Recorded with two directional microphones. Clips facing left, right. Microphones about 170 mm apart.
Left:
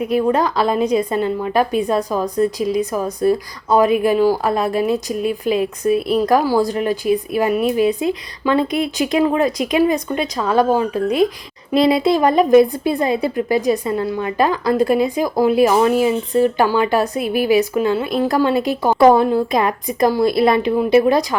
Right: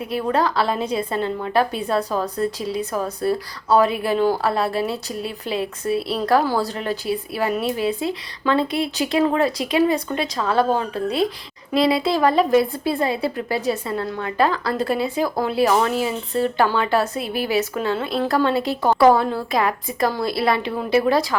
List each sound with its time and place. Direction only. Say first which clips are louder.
0.0 s a woman's voice: left 5 dB; 15° left (ahead or behind)